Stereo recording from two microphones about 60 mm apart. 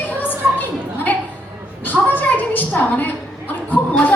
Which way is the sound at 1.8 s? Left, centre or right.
Left.